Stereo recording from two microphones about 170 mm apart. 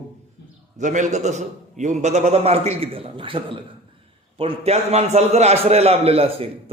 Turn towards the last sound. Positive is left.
turn(degrees=-35)  # may be behind; listen again after turning